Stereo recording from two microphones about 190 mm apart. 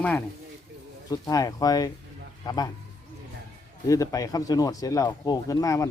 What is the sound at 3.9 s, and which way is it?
Speech, 20° left (ahead or behind).